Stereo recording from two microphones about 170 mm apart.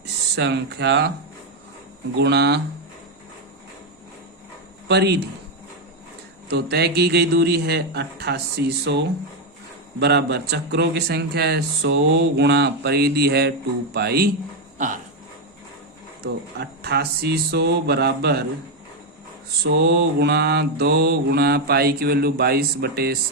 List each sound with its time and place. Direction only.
0.0 s speech: 85° right
2.1 s speech: 80° right
4.9 s mantra: 80° right
6.5 s mantra: 75° right (ahead or behind)
16.2 s mantra: 70° right (ahead or behind)
19.6 s mantra: 75° right (ahead or behind)